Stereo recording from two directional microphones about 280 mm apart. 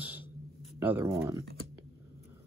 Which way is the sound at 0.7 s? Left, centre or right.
Centre.